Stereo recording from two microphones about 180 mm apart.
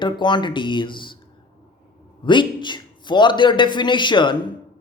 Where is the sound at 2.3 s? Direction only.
25° left (ahead or behind).